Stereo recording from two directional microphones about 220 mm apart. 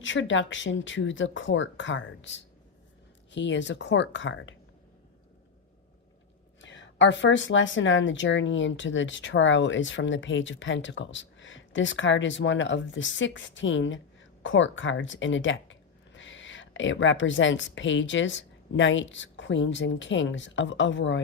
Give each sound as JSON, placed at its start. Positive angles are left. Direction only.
{"t": 0.0, "sound": "speech", "side_deg": 55}
{"t": 6.6, "sound": "speech", "side_deg": 55}